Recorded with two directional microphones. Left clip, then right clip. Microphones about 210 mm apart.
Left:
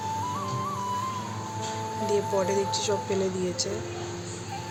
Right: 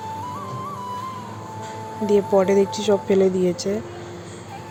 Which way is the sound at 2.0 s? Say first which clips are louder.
Right 9 dB; 30° right (ahead or behind).